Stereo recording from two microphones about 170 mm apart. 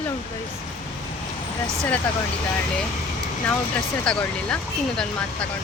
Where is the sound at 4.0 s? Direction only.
5° left (ahead or behind).